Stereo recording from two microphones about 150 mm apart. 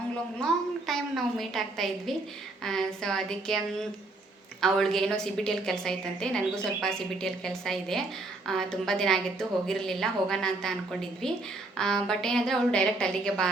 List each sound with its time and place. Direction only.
0.3 s a woman's voice: 5° left (ahead or behind)
11.8 s a woman's voice: 5° left (ahead or behind)